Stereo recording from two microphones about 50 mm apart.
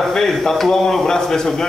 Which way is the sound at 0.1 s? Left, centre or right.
Centre.